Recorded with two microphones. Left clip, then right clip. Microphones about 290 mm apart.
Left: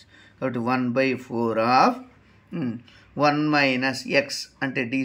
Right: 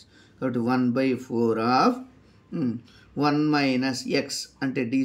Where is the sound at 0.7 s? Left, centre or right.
Centre.